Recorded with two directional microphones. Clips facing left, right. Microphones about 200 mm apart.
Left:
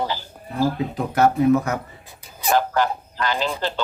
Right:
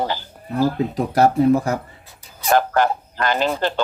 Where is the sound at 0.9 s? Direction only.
35° right (ahead or behind).